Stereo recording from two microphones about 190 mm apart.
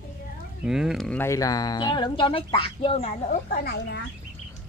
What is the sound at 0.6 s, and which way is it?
Speech, 5° right (ahead or behind).